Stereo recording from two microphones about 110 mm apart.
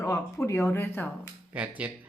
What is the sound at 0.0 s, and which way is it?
A woman's voice, 30° left (ahead or behind).